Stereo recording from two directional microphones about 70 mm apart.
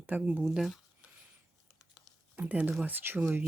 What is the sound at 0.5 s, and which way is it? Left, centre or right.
Speech, centre.